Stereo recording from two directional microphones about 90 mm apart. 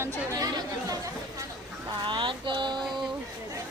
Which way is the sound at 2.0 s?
65° right (ahead or behind).